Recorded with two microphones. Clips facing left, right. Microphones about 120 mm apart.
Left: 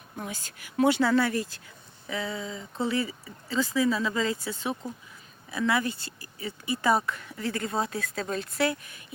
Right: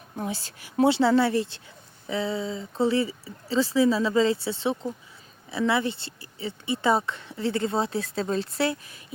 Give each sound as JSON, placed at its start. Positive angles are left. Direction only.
{"t": 0.2, "sound": "speech", "side_deg": -30}